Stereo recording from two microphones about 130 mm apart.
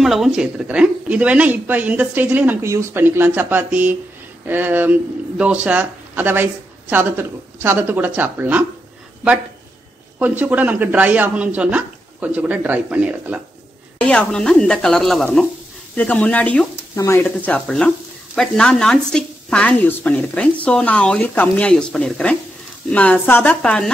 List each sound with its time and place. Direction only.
0.0 s speech: centre (ahead or behind)
10.1 s speech: 10° right (ahead or behind)
13.9 s speech: 10° left (ahead or behind)
15.9 s speech: 10° left (ahead or behind)
17.5 s speech: 10° left (ahead or behind)